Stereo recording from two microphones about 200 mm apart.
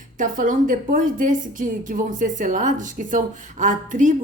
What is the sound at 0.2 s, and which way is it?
A woman's voice, 40° right (ahead or behind).